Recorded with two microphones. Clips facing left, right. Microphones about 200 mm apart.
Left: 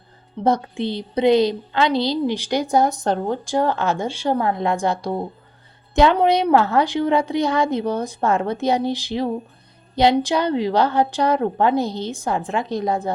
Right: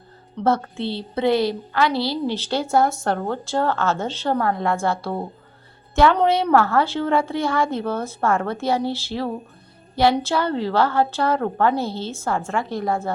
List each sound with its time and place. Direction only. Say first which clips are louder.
0.4 s a woman's voice: left 1 dB; 15° left (ahead or behind)